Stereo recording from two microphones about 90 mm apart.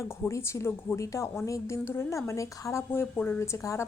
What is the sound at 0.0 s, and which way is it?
A woman's voice, 30° left (ahead or behind).